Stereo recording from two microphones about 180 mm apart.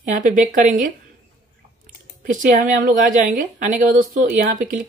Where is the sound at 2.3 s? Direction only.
45° right (ahead or behind).